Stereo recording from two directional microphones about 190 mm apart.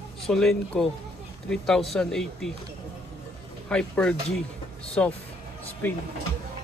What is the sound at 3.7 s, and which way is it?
Speech, 5° left (ahead or behind).